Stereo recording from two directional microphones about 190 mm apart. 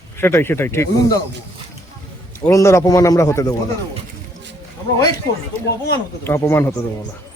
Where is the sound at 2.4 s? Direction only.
15° left (ahead or behind).